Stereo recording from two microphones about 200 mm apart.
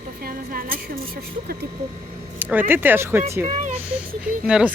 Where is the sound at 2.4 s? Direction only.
10° right (ahead or behind).